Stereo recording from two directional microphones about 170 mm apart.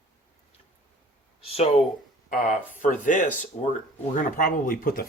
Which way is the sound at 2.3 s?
50° left (ahead or behind).